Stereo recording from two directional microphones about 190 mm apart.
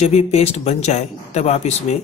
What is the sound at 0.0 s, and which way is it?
Speech, 35° left (ahead or behind).